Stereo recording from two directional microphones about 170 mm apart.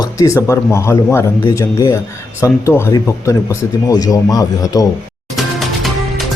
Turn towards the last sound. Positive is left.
turn(degrees=0)  # may be behind; listen again after turning